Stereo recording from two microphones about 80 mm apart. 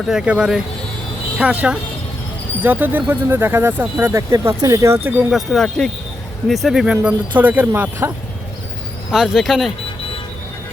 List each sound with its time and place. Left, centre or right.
0.0 s speech: centre; by 4.1 s right
4.1 s speech: right
5.0 s speech: right
5.3 s speech: centre; by 8.1 s right
9.1 s speech: centre